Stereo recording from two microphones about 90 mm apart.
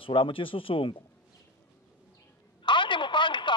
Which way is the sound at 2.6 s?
65° left (ahead or behind).